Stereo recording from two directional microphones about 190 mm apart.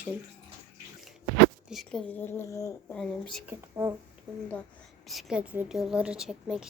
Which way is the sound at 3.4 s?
15° right (ahead or behind).